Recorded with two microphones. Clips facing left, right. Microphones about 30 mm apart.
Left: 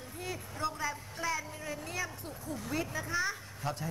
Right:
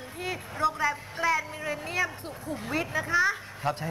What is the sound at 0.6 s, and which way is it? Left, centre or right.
Speech, centre.